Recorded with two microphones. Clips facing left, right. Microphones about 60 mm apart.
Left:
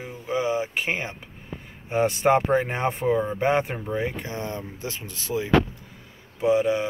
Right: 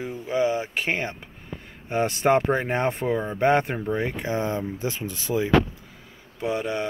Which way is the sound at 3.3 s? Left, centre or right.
Centre.